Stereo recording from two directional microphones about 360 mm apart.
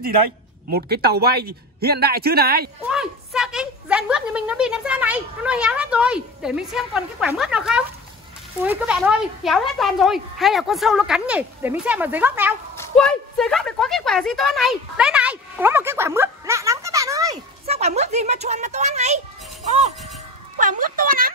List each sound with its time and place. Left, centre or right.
0.7 s a man's voice: right
2.9 s a woman's voice: centre
20.5 s a man's voice: right